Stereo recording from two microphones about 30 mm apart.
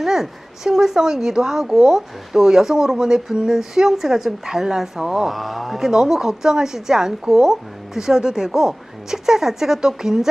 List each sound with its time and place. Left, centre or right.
0.0 s speech: centre
5.3 s speech: centre
5.8 s speech: centre